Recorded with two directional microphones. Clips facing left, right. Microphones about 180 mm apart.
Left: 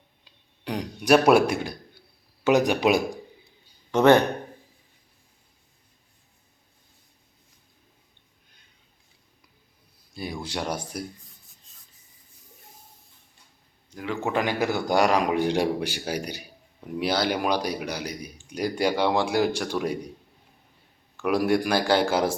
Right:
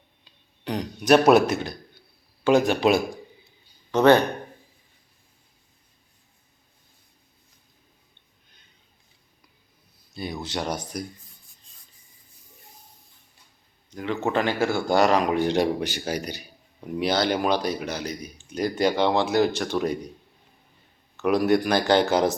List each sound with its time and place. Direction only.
0.6 s a man's voice: 10° left (ahead or behind)
10.4 s a man's voice: 10° left (ahead or behind)
13.9 s a man's voice: 5° left (ahead or behind)
21.2 s a man's voice: 10° left (ahead or behind)